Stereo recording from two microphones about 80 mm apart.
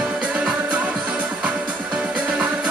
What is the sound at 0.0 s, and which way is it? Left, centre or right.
Music, centre.